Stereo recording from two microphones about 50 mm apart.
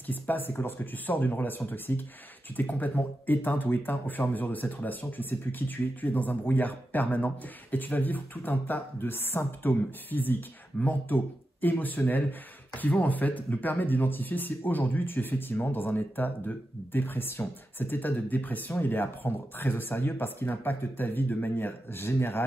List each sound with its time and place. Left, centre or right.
0.0 s speech: left